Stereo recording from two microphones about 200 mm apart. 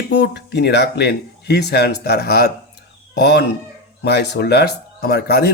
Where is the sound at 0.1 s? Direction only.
60° left (ahead or behind).